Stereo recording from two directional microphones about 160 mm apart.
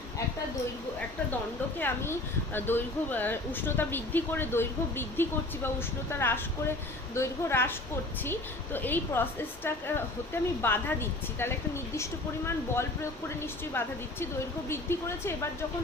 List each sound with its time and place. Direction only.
1.8 s speech: 15° left (ahead or behind)